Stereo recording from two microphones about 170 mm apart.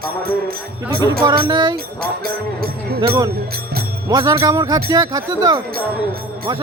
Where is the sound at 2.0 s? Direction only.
60° right (ahead or behind).